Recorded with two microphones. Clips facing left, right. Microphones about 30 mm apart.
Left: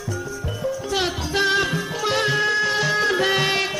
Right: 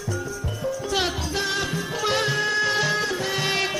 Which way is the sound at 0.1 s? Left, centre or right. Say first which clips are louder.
Left 1 dB; centre.